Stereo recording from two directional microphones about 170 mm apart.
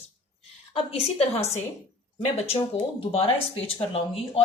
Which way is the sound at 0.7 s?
35° left (ahead or behind).